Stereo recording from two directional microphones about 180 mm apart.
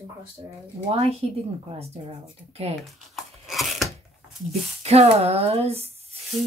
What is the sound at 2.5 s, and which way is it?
Speech, 35° right (ahead or behind).